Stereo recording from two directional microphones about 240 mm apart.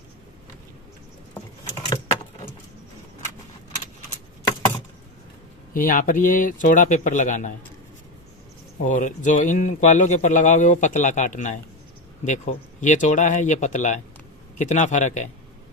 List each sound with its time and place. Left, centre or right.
1.9 s keys jangling: left
5.7 s speech: left
8.8 s speech: left